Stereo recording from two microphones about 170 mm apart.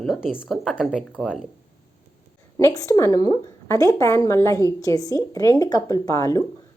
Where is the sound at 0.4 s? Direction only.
Centre (ahead or behind).